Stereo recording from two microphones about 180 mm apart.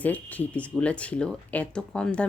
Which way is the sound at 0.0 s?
10° left (ahead or behind).